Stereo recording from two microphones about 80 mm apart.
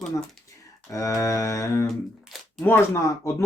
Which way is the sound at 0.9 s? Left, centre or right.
Left.